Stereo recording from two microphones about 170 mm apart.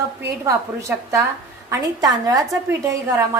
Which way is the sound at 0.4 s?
20° right (ahead or behind).